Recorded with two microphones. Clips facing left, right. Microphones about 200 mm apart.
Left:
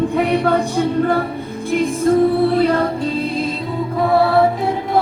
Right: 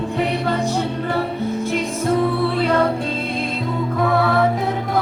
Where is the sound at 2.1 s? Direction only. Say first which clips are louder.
Left 5 dB; 40° left (ahead or behind).